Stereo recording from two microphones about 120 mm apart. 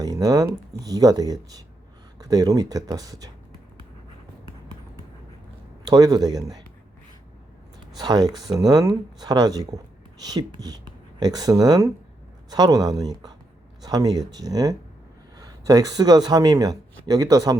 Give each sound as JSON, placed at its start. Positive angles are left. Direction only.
{"t": 0.0, "sound": "speech", "side_deg": -30}
{"t": 5.8, "sound": "speech", "side_deg": -30}
{"t": 7.9, "sound": "speech", "side_deg": -35}